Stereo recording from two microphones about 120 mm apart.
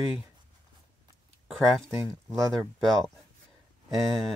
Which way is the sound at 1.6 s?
5° left (ahead or behind).